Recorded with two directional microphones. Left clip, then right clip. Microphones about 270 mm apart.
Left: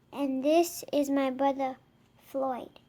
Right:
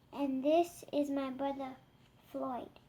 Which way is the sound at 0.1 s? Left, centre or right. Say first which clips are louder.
Left 5 dB; left.